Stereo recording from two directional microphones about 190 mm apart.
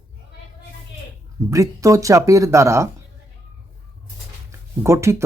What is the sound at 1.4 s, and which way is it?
Speech, 15° right (ahead or behind).